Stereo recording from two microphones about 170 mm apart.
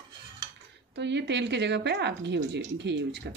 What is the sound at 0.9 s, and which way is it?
Speech, 90° right.